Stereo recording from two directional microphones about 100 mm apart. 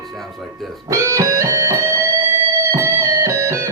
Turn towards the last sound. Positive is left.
turn(degrees=-30)  # may be behind; listen again after turning